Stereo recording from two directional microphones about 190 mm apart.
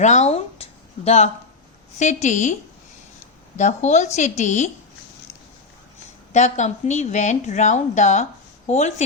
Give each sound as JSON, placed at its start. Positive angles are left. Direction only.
{"t": 0.0, "sound": "speech", "side_deg": 35}
{"t": 3.6, "sound": "speech", "side_deg": 40}
{"t": 6.3, "sound": "speech", "side_deg": 40}